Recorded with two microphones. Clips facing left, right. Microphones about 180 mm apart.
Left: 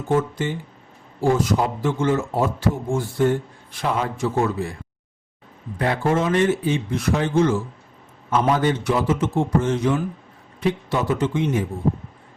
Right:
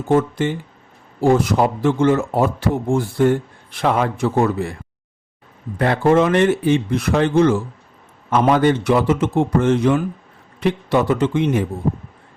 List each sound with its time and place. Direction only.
0.1 s a man's voice: 65° right (ahead or behind)
5.8 s speech: 70° right (ahead or behind)